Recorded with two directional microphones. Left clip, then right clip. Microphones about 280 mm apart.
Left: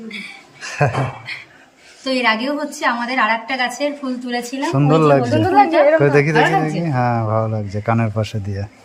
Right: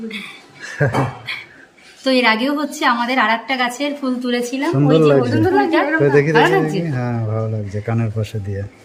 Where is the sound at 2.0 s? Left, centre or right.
Centre.